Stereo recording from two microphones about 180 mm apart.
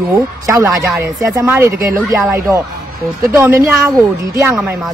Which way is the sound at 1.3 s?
15° right (ahead or behind).